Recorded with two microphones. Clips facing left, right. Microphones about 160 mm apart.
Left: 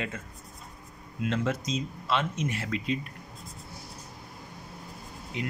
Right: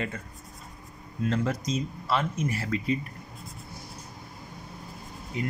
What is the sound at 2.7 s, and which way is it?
Speech, 90° left.